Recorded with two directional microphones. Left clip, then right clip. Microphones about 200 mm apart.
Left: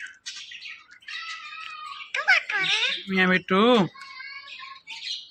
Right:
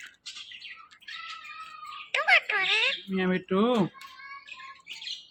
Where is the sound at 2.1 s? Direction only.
35° right (ahead or behind).